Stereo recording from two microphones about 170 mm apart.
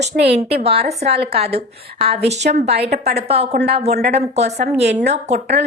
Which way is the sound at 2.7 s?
75° right (ahead or behind).